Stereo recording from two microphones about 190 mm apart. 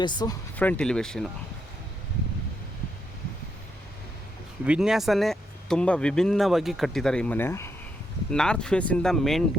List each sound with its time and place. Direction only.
0.0 s speech: 20° left (ahead or behind)
0.5 s speech: 10° left (ahead or behind)
4.6 s speech: 5° right (ahead or behind)